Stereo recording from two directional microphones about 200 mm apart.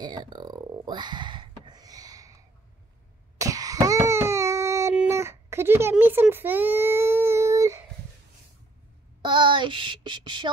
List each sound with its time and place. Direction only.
0.0 s burping: 20° right (ahead or behind)
3.3 s cough: 15° right (ahead or behind)
9.2 s child singing: 25° right (ahead or behind)